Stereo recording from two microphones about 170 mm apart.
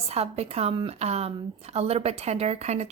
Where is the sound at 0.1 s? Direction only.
35° right (ahead or behind).